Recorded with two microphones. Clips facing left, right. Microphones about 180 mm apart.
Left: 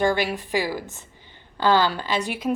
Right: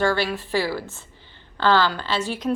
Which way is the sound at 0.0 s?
15° left (ahead or behind).